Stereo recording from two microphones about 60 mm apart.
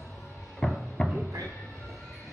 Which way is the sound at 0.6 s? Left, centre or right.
Centre.